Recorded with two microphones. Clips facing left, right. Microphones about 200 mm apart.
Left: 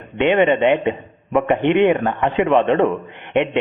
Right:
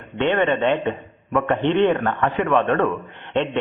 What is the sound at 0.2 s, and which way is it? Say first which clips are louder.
A man's voice: left 4 dB; 15° left (ahead or behind).